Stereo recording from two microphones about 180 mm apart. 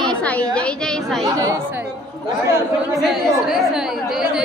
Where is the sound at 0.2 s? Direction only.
5° left (ahead or behind).